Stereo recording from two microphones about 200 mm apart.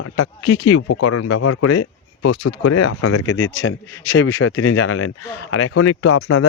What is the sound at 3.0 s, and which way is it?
A man's voice, 90° left.